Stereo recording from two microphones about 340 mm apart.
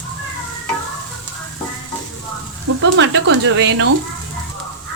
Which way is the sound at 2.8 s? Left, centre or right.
Right.